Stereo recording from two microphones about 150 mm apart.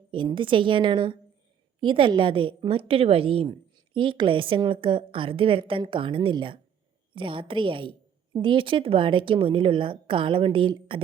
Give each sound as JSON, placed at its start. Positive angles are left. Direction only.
{"t": 0.1, "sound": "a woman's voice", "side_deg": -35}